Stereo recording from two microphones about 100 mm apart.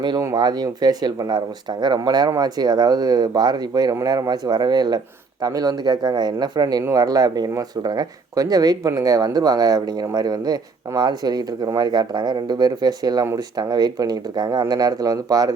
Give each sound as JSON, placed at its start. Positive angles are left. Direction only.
{"t": 0.3, "sound": "speech", "side_deg": -45}